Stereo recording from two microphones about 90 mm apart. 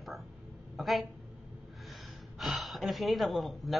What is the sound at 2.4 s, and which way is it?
Speech, centre (ahead or behind).